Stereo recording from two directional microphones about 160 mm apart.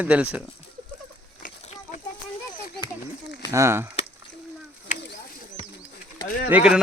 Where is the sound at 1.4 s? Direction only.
55° left (ahead or behind).